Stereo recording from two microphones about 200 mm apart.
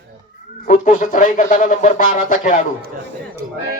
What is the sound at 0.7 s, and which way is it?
Speech, 40° left (ahead or behind).